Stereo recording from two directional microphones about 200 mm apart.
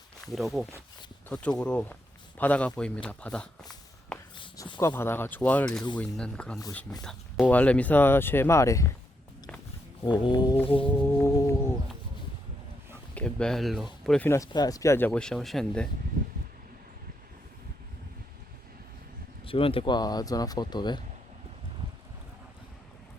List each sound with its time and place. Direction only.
0.3 s speech: centre (ahead or behind)
4.4 s speech: 20° left (ahead or behind); by 6.6 s 5° left (ahead or behind)
6.6 s speech: 15° left (ahead or behind)
7.0 s speech: centre (ahead or behind)
10.0 s speech: 25° left (ahead or behind)
13.1 s speech: 5° left (ahead or behind)
14.3 s speech: 15° left (ahead or behind)
19.5 s speech: 25° left (ahead or behind)